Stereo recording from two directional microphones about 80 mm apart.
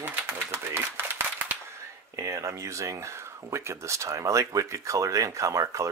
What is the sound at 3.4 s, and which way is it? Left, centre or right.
Speech, right.